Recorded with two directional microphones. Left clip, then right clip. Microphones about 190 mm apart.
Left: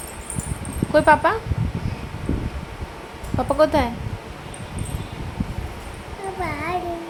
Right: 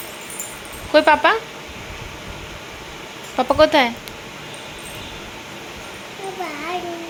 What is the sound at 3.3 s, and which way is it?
Speech, 5° right (ahead or behind).